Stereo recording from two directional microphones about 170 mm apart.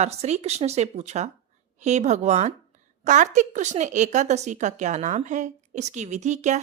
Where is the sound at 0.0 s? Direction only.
40° right (ahead or behind).